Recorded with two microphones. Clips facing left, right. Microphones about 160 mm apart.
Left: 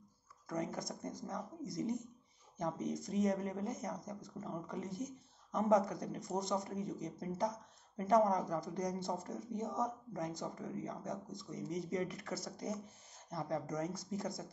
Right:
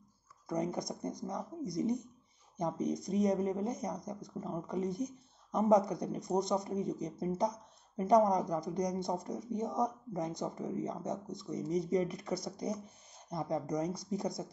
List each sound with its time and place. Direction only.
0.5 s speech: 15° right (ahead or behind)